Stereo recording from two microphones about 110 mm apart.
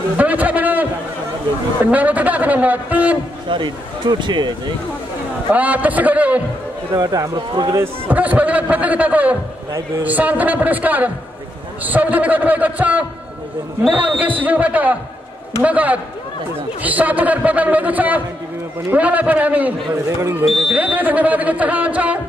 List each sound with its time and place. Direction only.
0.2 s a sound: 15° right (ahead or behind)
1.9 s a man's voice: 15° right (ahead or behind)
3.4 s speech: 45° right (ahead or behind)
5.5 s a man's voice: 15° right (ahead or behind)
7.0 s speech: 35° right (ahead or behind)
7.7 s a man's voice: 20° right (ahead or behind)
9.7 s speech: 30° right (ahead or behind)
10.0 s a man's voice: 15° right (ahead or behind)
19.9 s speech: 25° right (ahead or behind)
20.6 s a man's voice: 10° right (ahead or behind)